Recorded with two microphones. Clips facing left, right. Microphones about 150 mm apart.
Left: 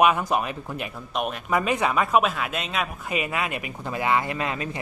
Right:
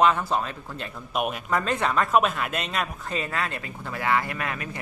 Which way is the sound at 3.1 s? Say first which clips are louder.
Left 2 dB; 15° left (ahead or behind).